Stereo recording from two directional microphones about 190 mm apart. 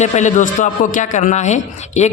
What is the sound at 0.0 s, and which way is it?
A man's voice, 40° left (ahead or behind).